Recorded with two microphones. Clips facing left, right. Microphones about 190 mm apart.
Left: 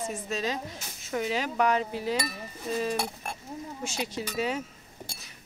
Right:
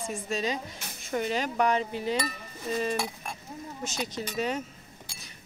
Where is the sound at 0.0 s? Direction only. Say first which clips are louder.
Even; 5° left (ahead or behind).